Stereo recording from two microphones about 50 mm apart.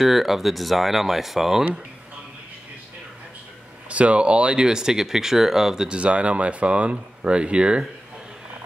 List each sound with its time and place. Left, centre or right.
0.0 s speech: centre
3.9 s speech: right; by 5.9 s centre
5.9 s speech: right